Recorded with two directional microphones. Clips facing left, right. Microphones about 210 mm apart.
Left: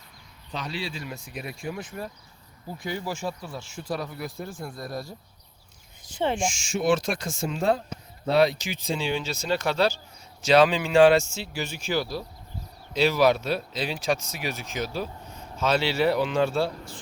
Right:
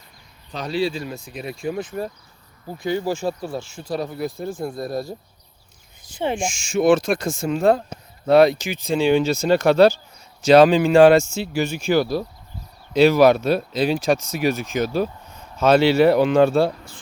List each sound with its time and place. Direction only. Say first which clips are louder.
0.5 s speech: right 10 dB; 40° right (ahead or behind)
6.0 s speech: right 2 dB; 10° right (ahead or behind)
6.4 s speech: right 7 dB; 50° right (ahead or behind)